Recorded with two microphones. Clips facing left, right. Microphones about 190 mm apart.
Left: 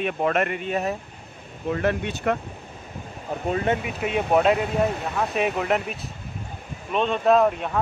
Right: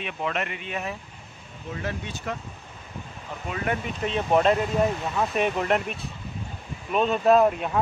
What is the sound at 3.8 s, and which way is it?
Speech, 10° left (ahead or behind).